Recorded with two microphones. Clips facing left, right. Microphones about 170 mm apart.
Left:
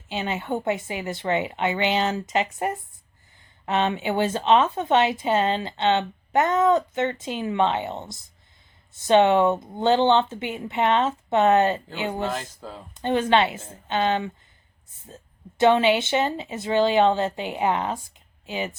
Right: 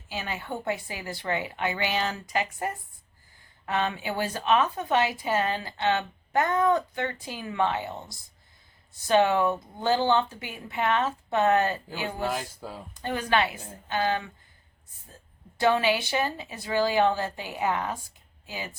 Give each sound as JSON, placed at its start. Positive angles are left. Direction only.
{"t": 0.1, "sound": "speech", "side_deg": 25}
{"t": 12.3, "sound": "speech", "side_deg": -5}
{"t": 12.9, "sound": "speech", "side_deg": 25}